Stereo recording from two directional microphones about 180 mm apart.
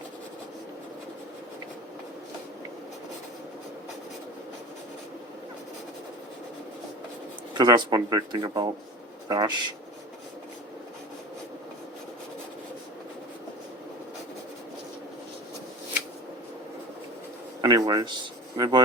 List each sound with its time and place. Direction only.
7.5 s speech: 25° right (ahead or behind)
17.6 s speech: 20° right (ahead or behind)